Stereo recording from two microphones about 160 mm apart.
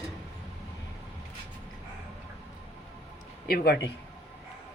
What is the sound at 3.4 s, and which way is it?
Speech, 80° left.